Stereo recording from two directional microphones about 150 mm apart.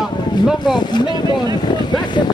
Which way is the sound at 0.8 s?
30° left (ahead or behind).